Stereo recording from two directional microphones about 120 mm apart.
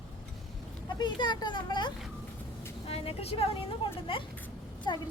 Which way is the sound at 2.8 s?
55° left (ahead or behind).